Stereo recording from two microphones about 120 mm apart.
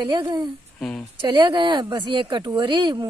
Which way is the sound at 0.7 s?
5° left (ahead or behind).